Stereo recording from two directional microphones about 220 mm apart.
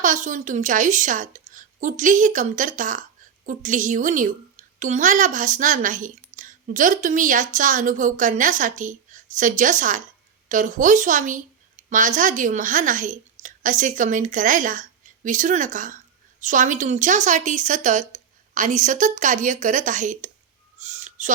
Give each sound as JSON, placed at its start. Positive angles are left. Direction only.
{"t": 0.0, "sound": "a woman's voice", "side_deg": -35}
{"t": 20.7, "sound": "owl", "side_deg": -30}